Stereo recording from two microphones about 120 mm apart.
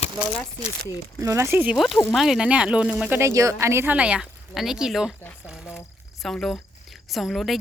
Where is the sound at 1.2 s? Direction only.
25° right (ahead or behind).